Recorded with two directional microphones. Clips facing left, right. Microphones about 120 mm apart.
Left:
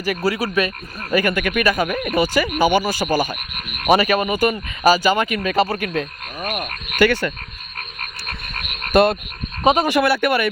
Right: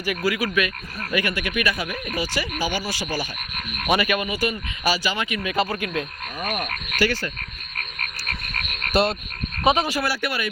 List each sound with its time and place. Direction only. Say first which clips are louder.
0.0 s speech: left 3 dB; 35° left (ahead or behind)
1.1 s speech: left 6 dB; 45° left (ahead or behind)
3.8 s speech: left 6 dB; 35° left (ahead or behind)
5.6 s speech: left 4 dB; 35° left (ahead or behind)
7.0 s speech: left 7 dB; 60° left (ahead or behind)
8.9 s frog: left 6 dB; 50° left (ahead or behind)
9.6 s speech: left 4 dB; 40° left (ahead or behind)
9.9 s speech: left 9 dB; 60° left (ahead or behind)